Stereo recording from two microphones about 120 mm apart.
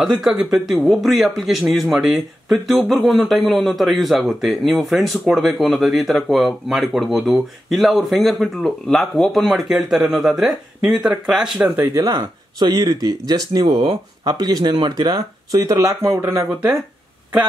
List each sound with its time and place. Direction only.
0.0 s speech: 5° right (ahead or behind)
11.8 s speech: 25° right (ahead or behind)